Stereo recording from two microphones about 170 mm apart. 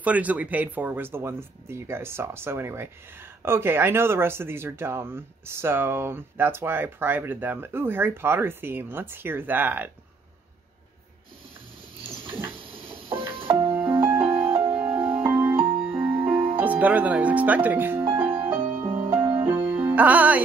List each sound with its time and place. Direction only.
0.0 s speech: 10° right (ahead or behind)
13.3 s music: 30° right (ahead or behind)
13.7 s music: 15° right (ahead or behind)
16.5 s speech: 10° right (ahead or behind)
18.1 s music: 15° right (ahead or behind)